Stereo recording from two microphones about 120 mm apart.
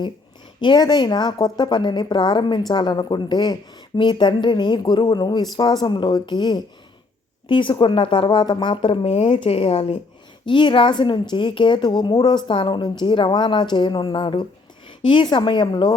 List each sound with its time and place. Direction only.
0.6 s a woman's voice: 35° left (ahead or behind); by 10.0 s 60° left (ahead or behind)
10.4 s speech: 40° left (ahead or behind)